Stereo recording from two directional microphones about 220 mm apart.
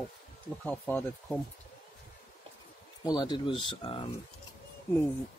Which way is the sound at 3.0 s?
20° left (ahead or behind).